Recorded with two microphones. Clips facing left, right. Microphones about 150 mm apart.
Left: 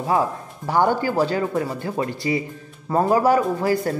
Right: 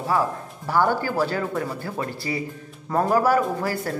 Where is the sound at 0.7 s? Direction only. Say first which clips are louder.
Left 2 dB; 20° left (ahead or behind).